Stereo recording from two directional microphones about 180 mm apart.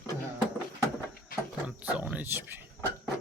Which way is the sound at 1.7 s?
5° right (ahead or behind).